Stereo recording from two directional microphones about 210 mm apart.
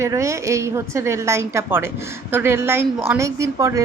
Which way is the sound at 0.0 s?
15° right (ahead or behind).